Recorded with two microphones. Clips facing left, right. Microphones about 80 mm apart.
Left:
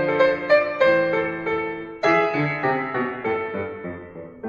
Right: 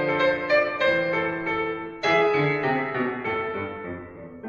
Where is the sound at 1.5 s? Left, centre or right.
Left.